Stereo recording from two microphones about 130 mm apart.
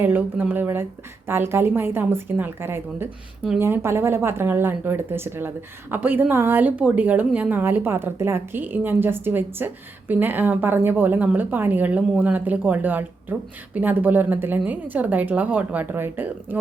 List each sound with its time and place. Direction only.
0.0 s a woman's voice: 15° right (ahead or behind)